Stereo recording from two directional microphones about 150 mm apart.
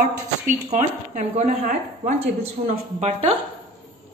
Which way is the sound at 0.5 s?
55° right (ahead or behind).